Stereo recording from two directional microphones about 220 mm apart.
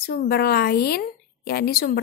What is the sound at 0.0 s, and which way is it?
A woman's voice, 45° left (ahead or behind).